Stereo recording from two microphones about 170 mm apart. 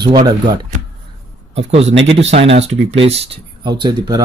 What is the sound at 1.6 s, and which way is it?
Speech, 35° right (ahead or behind).